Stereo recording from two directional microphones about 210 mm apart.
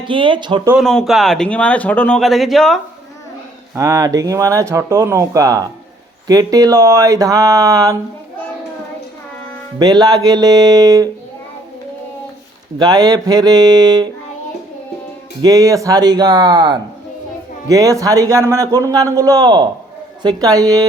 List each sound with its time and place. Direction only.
0.0 s speech: 25° right (ahead or behind)
0.7 s speech: centre (ahead or behind)
3.8 s a man's voice: 15° right (ahead or behind)
9.7 s speech: 20° right (ahead or behind)
12.8 s speech: 20° right (ahead or behind)
15.4 s a man's voice: 15° right (ahead or behind)